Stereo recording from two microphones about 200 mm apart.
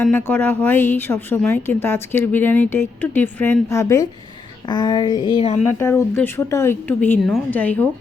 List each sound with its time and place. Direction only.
0.0 s a woman's voice: 10° left (ahead or behind)
4.7 s a sound: 20° left (ahead or behind)
5.8 s a woman's voice: 15° left (ahead or behind)